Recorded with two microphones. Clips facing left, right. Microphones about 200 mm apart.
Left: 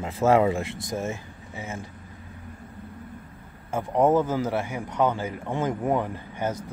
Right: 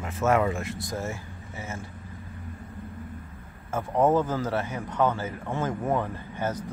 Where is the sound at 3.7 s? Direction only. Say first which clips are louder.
Left 2 dB; 15° left (ahead or behind).